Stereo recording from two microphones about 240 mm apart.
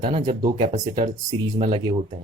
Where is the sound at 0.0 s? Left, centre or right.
Right.